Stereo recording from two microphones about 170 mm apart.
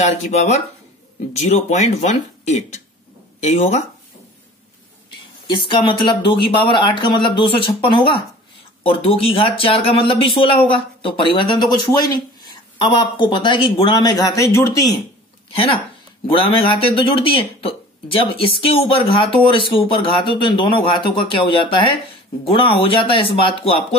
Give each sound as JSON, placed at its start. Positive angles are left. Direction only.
{"t": 0.0, "sound": "speech", "side_deg": 40}
{"t": 5.5, "sound": "speech", "side_deg": 30}
{"t": 12.8, "sound": "speech", "side_deg": 25}
{"t": 15.5, "sound": "speech", "side_deg": 35}